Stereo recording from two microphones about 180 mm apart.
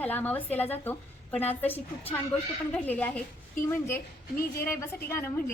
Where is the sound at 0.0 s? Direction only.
10° left (ahead or behind).